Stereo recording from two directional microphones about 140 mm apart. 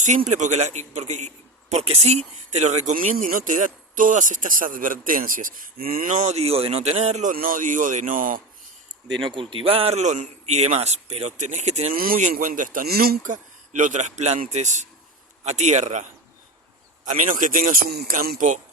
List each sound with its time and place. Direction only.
0.0 s speech: 60° right (ahead or behind); by 8.4 s 75° right (ahead or behind)
9.2 s a man's voice: 40° right (ahead or behind)
11.9 s speech: 90° right; by 16.0 s 55° right (ahead or behind)
17.1 s speech: 65° right (ahead or behind)